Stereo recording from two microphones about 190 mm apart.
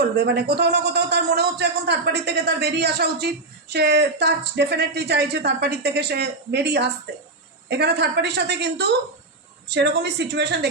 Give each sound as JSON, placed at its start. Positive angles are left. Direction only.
{"t": 0.0, "sound": "a man's voice", "side_deg": -60}